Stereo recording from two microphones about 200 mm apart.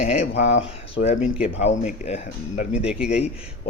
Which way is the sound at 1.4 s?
30° left (ahead or behind).